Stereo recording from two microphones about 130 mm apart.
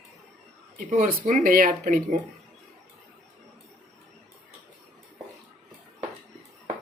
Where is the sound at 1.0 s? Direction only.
90° right.